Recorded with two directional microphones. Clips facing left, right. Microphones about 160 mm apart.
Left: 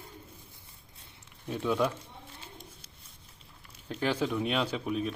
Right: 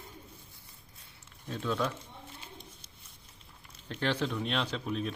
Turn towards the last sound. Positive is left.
turn(degrees=5)  # may be behind; listen again after turning